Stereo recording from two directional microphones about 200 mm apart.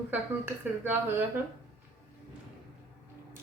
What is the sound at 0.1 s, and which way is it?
Speech, 10° right (ahead or behind).